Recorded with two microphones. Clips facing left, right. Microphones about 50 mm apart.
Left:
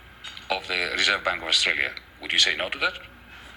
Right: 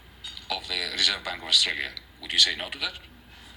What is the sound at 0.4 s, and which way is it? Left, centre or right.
A woman's voice, left.